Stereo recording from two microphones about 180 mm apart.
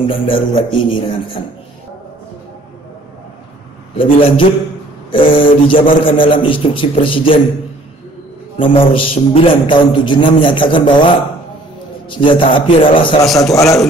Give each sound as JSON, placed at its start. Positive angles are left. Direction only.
{"t": 0.0, "sound": "a man's voice", "side_deg": 30}
{"t": 3.9, "sound": "a man's voice", "side_deg": 30}
{"t": 8.5, "sound": "a man's voice", "side_deg": 30}
{"t": 12.2, "sound": "a man's voice", "side_deg": 30}